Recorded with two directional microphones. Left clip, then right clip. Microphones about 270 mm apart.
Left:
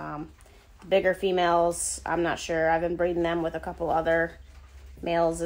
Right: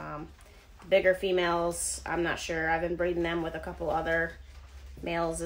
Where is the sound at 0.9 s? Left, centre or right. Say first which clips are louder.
Left 1 dB; centre.